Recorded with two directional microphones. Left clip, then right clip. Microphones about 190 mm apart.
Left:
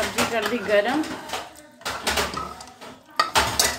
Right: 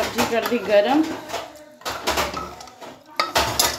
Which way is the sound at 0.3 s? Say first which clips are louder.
Right 3 dB; 15° right (ahead or behind).